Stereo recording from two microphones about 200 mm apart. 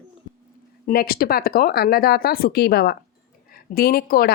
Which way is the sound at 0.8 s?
50° left (ahead or behind).